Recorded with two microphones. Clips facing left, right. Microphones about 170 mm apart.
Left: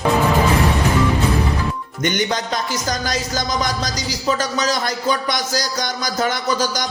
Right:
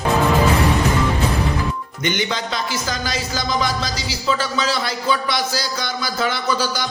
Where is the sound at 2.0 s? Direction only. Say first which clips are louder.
Left 2 dB; 45° left (ahead or behind).